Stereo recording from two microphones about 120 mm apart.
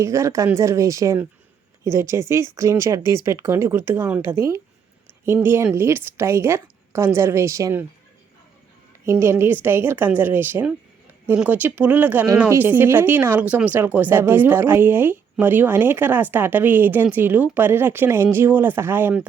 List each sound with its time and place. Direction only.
0.0 s a woman's voice: 25° right (ahead or behind)
9.0 s speech: 20° right (ahead or behind)